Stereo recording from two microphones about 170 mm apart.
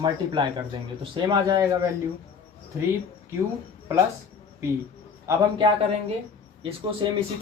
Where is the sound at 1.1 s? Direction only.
25° right (ahead or behind).